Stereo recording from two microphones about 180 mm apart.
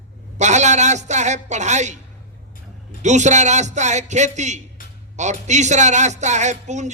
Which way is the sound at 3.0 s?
40° right (ahead or behind).